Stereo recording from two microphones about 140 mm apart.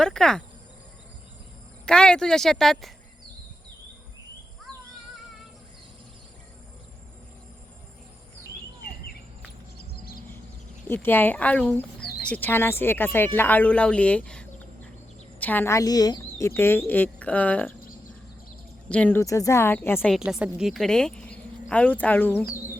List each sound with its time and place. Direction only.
0.0 s speech: 5° left (ahead or behind)
1.9 s speech: 5° left (ahead or behind)
9.9 s a sound: 90° left
10.8 s speech: 15° left (ahead or behind)
18.9 s speech: 10° left (ahead or behind)
19.2 s speech: 25° left (ahead or behind)
20.1 s speech: 5° right (ahead or behind); by 22.4 s 15° left (ahead or behind)